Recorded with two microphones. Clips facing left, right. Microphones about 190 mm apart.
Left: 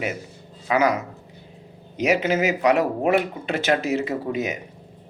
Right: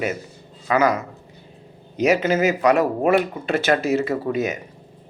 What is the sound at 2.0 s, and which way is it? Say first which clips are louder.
Speech: right 3 dB; 15° left (ahead or behind).